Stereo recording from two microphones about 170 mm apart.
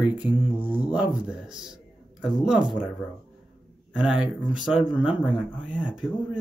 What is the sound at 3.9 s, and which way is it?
Speech, 5° right (ahead or behind).